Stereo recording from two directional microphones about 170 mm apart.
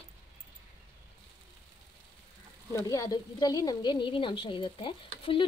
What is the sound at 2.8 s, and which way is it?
A woman's voice, 20° left (ahead or behind).